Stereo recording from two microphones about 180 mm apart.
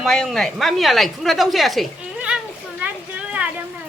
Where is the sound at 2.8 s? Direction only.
10° right (ahead or behind).